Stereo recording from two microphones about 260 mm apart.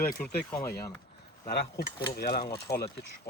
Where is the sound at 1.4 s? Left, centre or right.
Left.